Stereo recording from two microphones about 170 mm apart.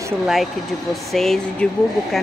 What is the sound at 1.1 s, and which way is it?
Speech, centre (ahead or behind).